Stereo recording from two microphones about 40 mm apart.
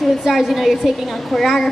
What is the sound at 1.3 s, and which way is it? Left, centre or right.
Speech, centre.